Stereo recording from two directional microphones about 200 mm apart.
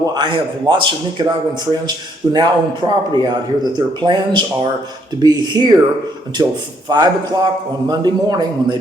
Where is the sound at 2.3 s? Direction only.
20° right (ahead or behind).